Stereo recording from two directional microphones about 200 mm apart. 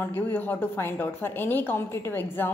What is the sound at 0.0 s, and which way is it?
A woman's voice, 10° left (ahead or behind).